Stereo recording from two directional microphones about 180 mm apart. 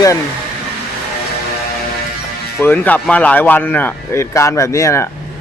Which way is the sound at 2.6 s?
10° left (ahead or behind).